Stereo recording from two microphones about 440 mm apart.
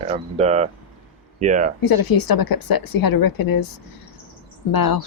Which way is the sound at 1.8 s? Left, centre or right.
Left.